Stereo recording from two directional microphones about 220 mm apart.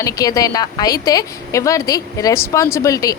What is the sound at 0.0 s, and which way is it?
A woman's voice, 15° left (ahead or behind).